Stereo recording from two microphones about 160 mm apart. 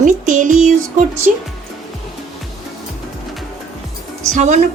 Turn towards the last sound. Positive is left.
turn(degrees=-50)  # may be behind; listen again after turning